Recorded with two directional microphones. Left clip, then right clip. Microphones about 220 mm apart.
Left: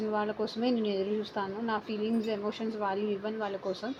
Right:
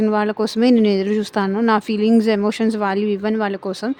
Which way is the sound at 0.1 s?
55° right (ahead or behind).